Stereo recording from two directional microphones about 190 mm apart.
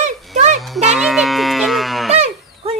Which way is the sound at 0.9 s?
Centre (ahead or behind).